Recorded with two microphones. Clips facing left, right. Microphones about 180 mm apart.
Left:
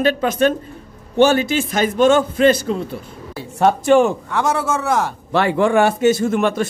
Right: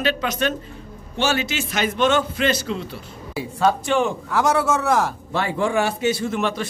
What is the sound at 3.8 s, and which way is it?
Speech, 45° left (ahead or behind).